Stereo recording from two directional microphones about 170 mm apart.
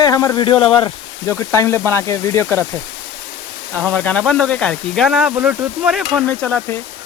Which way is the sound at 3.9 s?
10° left (ahead or behind).